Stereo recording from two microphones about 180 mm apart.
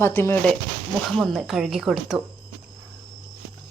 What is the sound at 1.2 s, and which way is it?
Speech, centre (ahead or behind).